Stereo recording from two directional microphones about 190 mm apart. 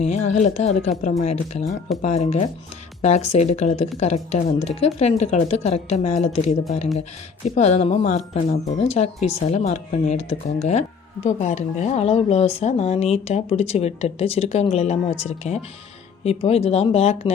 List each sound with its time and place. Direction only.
0.0 s speech: 40° left (ahead or behind)